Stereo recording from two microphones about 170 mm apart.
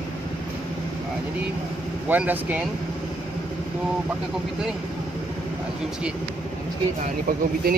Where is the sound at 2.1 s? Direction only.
10° right (ahead or behind).